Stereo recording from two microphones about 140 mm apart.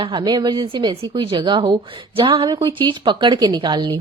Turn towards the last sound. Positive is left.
turn(degrees=-30)  # may be behind; listen again after turning